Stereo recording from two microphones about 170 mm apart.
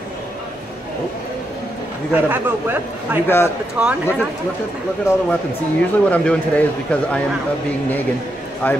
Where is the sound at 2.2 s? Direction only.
10° right (ahead or behind).